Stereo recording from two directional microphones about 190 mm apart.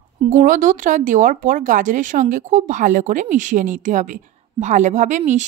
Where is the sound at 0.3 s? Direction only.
45° right (ahead or behind).